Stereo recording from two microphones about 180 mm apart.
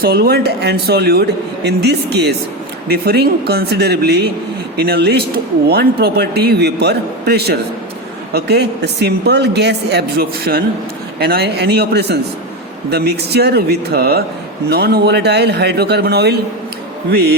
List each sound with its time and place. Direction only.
0.0 s a man's voice: 60° right (ahead or behind)